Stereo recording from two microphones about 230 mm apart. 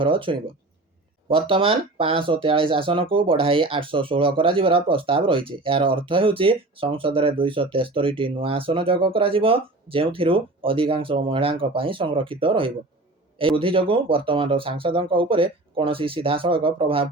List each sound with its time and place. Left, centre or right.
0.0 s speech: right